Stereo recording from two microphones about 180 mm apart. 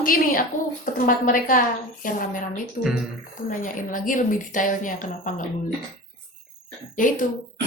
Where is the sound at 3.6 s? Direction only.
45° left (ahead or behind).